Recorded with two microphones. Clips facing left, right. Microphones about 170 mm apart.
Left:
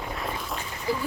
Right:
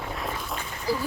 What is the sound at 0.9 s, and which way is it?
Speech, 35° right (ahead or behind).